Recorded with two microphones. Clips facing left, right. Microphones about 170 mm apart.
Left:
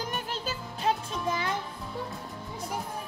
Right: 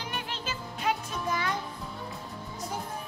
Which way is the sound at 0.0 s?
40° left (ahead or behind).